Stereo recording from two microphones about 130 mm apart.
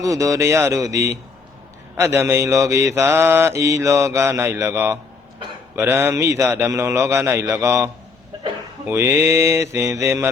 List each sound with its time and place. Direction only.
0.0 s mantra: 25° right (ahead or behind)
8.9 s mantra: 15° right (ahead or behind)